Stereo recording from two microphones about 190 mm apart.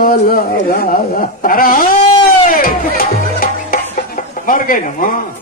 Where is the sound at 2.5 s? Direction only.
50° left (ahead or behind).